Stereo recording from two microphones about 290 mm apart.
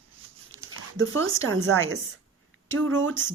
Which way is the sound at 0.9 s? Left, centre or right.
Right.